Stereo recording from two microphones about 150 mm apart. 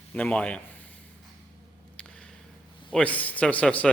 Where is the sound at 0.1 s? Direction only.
5° left (ahead or behind).